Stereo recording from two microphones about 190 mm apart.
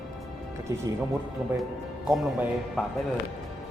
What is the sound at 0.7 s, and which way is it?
Speech, 15° right (ahead or behind).